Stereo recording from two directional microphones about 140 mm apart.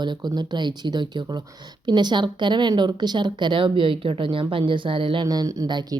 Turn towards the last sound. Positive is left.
turn(degrees=-30)  # may be behind; listen again after turning